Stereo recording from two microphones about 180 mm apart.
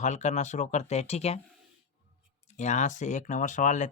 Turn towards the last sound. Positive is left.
turn(degrees=45)  # may be behind; listen again after turning